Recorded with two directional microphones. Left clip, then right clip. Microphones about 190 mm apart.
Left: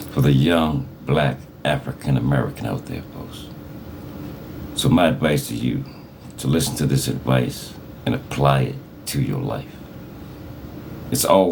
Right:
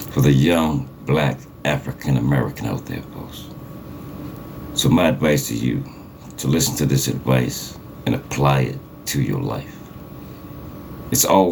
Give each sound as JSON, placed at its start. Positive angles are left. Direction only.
{"t": 0.1, "sound": "speech", "side_deg": -5}
{"t": 4.7, "sound": "speech", "side_deg": 0}
{"t": 11.1, "sound": "speech", "side_deg": 0}